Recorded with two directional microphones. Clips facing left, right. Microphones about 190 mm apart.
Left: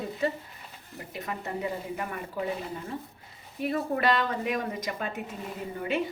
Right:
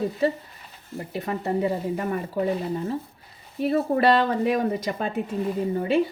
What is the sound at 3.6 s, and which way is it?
Speech, 35° right (ahead or behind).